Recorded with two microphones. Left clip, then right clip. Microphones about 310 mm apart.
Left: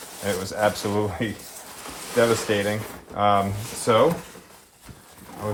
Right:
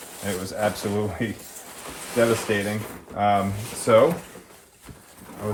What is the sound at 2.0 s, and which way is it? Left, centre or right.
Speech, centre.